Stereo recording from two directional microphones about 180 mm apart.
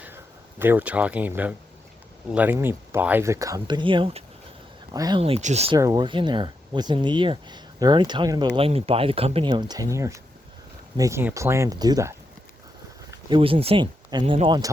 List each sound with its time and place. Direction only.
0.6 s speech: 10° right (ahead or behind)
5.2 s speech: 35° right (ahead or behind)
5.7 s speech: 20° right (ahead or behind)